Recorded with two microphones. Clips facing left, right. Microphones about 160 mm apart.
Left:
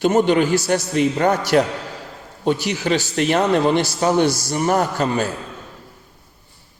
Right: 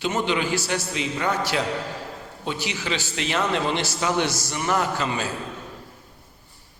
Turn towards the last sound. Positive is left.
turn(degrees=45)  # may be behind; listen again after turning